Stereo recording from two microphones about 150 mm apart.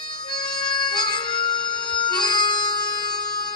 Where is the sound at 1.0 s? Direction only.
30° left (ahead or behind).